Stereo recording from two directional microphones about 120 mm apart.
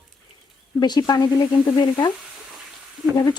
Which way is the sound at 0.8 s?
35° left (ahead or behind).